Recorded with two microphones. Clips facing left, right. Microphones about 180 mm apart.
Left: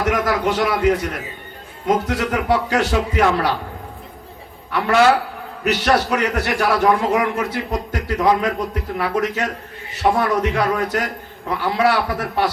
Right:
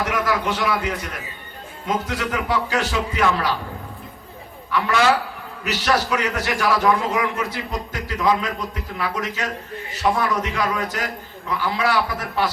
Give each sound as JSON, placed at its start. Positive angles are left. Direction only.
{"t": 0.0, "sound": "a man's voice", "side_deg": 50}
{"t": 4.7, "sound": "a man's voice", "side_deg": 55}